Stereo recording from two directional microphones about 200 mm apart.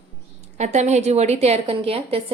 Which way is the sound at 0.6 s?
35° right (ahead or behind).